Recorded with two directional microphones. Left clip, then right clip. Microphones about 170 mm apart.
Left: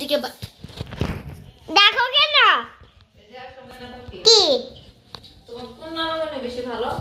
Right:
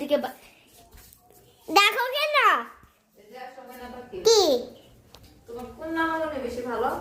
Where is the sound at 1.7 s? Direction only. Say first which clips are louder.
Left 5 dB; 15° right (ahead or behind).